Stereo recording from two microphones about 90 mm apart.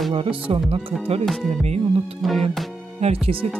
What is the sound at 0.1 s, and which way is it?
Speech, 80° right.